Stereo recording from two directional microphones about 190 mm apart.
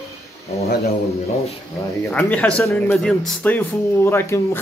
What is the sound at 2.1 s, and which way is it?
Speech, 10° left (ahead or behind).